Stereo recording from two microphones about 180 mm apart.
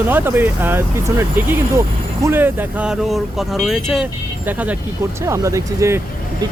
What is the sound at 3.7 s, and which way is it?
Speech, centre (ahead or behind).